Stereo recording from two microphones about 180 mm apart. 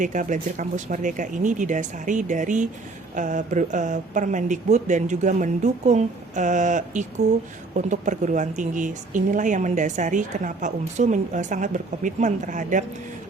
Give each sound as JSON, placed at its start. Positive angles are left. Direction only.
{"t": 0.0, "sound": "a woman's voice", "side_deg": -45}